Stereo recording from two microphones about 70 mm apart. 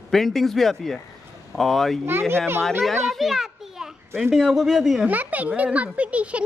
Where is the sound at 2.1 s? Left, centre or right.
Right.